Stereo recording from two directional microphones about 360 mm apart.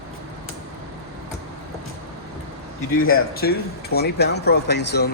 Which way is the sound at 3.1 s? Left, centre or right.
Left.